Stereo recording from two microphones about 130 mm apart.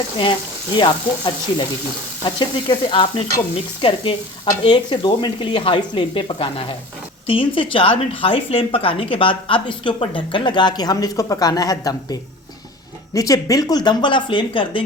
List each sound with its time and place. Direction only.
0.8 s speech: 40° left (ahead or behind)
13.1 s speech: 25° left (ahead or behind)